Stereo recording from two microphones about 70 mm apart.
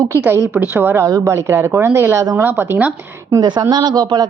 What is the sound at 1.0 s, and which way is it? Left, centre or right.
Speech, right.